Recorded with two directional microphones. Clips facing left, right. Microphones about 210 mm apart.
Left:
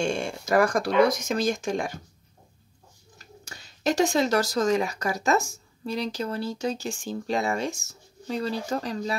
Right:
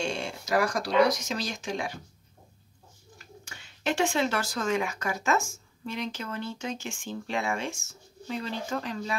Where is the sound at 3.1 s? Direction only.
40° left (ahead or behind).